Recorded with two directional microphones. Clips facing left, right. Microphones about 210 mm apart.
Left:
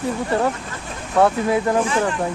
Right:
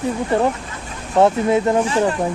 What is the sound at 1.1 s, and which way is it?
Speech, 20° right (ahead or behind).